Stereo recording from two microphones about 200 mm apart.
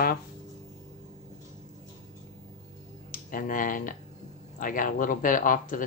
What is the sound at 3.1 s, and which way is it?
Speech, 45° left (ahead or behind).